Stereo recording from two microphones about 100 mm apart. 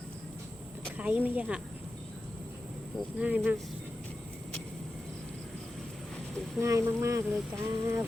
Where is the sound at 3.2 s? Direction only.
15° right (ahead or behind).